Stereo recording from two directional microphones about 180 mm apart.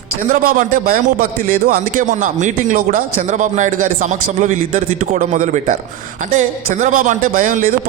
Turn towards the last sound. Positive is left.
turn(degrees=-50)  # may be behind; listen again after turning